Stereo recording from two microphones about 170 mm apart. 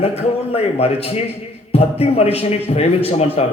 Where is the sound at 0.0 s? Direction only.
35° left (ahead or behind).